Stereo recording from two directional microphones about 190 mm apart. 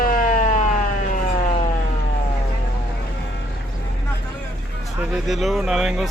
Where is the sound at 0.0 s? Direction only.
45° left (ahead or behind).